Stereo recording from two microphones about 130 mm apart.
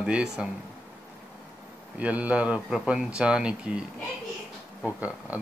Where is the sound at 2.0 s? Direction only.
10° right (ahead or behind).